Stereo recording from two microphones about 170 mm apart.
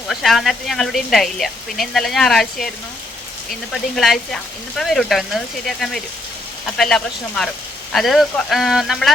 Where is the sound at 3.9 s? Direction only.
Centre (ahead or behind).